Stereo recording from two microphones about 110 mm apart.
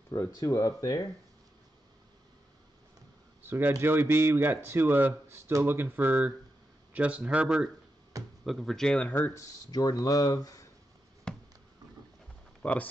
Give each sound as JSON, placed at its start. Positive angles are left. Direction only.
{"t": 0.1, "sound": "speech", "side_deg": 30}
{"t": 3.4, "sound": "speech", "side_deg": -20}
{"t": 8.2, "sound": "a sound", "side_deg": -30}
{"t": 8.5, "sound": "speech", "side_deg": 0}
{"t": 9.1, "sound": "speech", "side_deg": 25}
{"t": 9.7, "sound": "speech", "side_deg": 35}
{"t": 11.3, "sound": "a sound", "side_deg": 5}
{"t": 12.6, "sound": "speech", "side_deg": 10}